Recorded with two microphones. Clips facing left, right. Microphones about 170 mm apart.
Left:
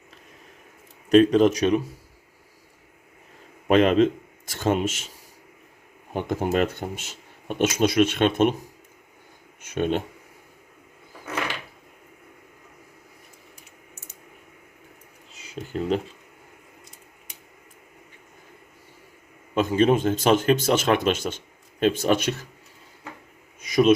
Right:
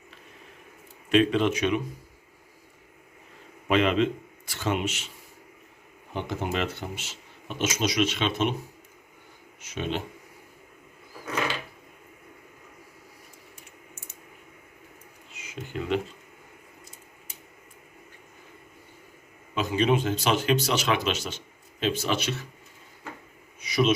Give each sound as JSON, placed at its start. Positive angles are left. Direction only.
{"t": 1.1, "sound": "speech", "side_deg": 40}
{"t": 3.7, "sound": "speech", "side_deg": 45}
{"t": 6.1, "sound": "speech", "side_deg": 45}
{"t": 9.6, "sound": "speech", "side_deg": 50}
{"t": 15.3, "sound": "a sound", "side_deg": 35}
{"t": 19.5, "sound": "speech", "side_deg": 50}